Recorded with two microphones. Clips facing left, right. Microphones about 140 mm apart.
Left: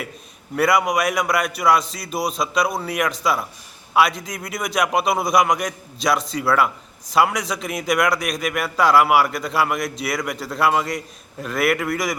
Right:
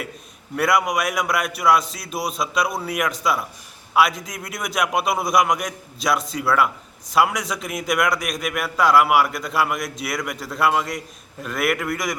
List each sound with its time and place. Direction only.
0.5 s a man's voice: centre (ahead or behind)